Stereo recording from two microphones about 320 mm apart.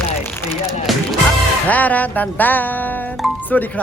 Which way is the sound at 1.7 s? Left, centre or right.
Centre.